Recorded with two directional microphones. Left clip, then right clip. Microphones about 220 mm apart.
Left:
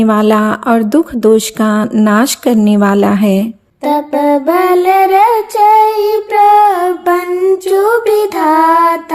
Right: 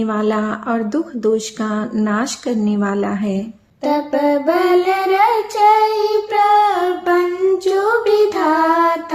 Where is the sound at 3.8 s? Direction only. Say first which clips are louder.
Left 5 dB; 35° left (ahead or behind).